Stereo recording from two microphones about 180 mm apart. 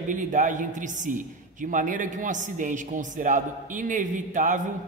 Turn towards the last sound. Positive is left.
turn(degrees=-45)  # may be behind; listen again after turning